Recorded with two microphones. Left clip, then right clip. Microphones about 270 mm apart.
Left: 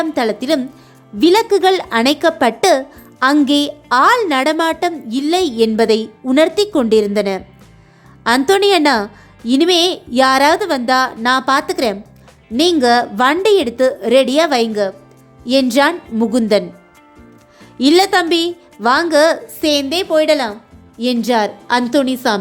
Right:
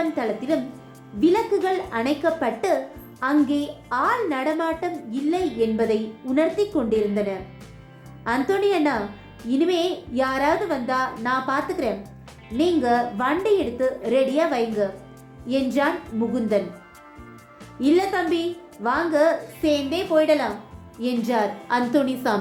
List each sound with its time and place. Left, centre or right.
0.1 s a woman's voice: left
17.7 s a woman's voice: left